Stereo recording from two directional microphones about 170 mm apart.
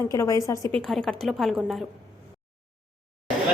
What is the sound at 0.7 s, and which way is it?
A woman's voice, 5° left (ahead or behind).